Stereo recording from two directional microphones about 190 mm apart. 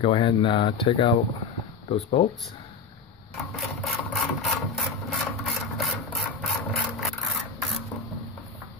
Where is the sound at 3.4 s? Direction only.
Centre (ahead or behind).